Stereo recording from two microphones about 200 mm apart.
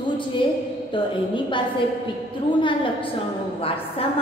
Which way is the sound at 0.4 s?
25° left (ahead or behind).